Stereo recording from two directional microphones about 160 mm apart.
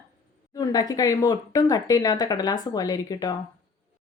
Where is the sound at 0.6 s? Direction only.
25° left (ahead or behind).